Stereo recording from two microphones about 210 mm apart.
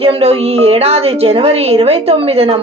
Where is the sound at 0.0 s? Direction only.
25° right (ahead or behind).